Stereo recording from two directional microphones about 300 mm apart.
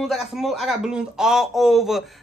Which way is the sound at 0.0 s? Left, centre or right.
Centre.